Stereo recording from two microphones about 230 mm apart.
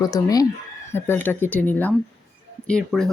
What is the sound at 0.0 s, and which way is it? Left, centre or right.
Speech, centre.